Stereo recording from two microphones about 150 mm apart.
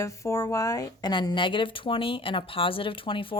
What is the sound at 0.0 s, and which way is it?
Speech, 20° left (ahead or behind).